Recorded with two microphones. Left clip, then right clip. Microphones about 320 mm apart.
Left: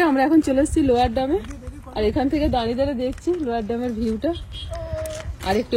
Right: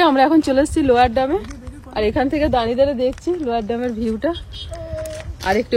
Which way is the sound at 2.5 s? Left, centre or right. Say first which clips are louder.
Right 5 dB; centre.